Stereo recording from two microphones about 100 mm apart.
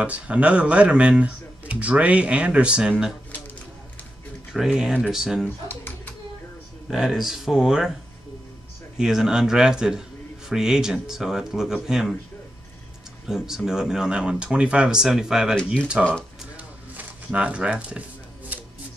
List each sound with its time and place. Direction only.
0.0 s speech: 15° right (ahead or behind)
4.5 s speech: 5° right (ahead or behind)
6.9 s speech: 5° right (ahead or behind)
8.9 s speech: 5° right (ahead or behind)
13.3 s speech: 5° right (ahead or behind)
16.5 s a sound: 15° right (ahead or behind)
18.5 s shuffling cards: 15° right (ahead or behind)